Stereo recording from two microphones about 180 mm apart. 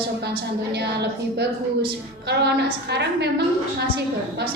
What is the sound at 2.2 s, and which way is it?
A woman's voice, 65° right (ahead or behind).